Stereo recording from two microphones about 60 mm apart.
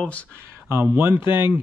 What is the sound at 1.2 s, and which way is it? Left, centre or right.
Speech, right.